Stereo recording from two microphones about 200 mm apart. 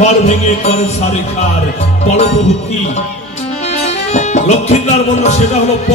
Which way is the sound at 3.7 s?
35° left (ahead or behind).